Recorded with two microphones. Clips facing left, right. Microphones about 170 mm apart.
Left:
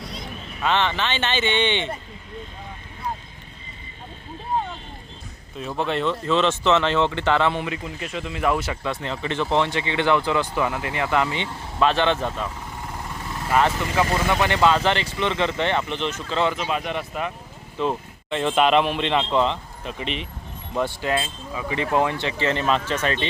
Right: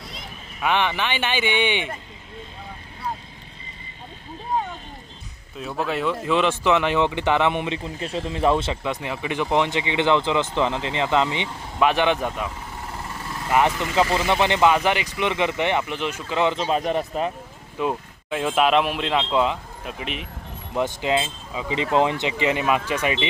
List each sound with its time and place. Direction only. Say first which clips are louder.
0.6 s speech: even; 15° right (ahead or behind)
5.5 s speech: left 1 dB; centre (ahead or behind)
13.5 s speech: right 1 dB; 15° right (ahead or behind)
16.6 s speech: right 4 dB; 35° right (ahead or behind)
17.7 s speech: even; 10° right (ahead or behind)
20.7 s speech: right 1 dB; 20° right (ahead or behind)